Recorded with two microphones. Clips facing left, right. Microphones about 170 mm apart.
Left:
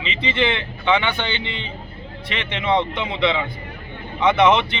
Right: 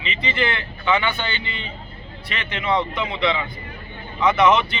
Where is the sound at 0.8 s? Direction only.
20° left (ahead or behind).